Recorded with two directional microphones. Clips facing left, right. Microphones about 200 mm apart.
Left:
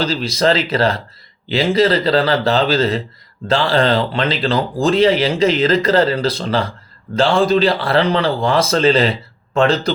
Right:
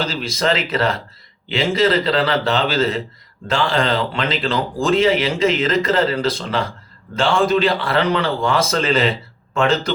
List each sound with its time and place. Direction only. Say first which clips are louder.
0.0 s speech: left 4 dB; 35° left (ahead or behind)